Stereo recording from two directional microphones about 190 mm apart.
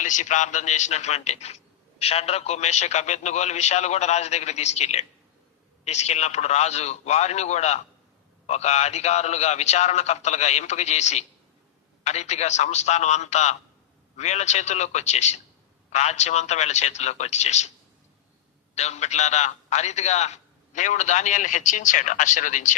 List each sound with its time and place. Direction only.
0.0 s a man's voice: 40° left (ahead or behind)
18.7 s a man's voice: 35° left (ahead or behind)